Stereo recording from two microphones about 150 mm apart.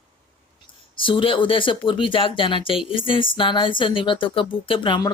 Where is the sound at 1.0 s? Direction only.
35° left (ahead or behind).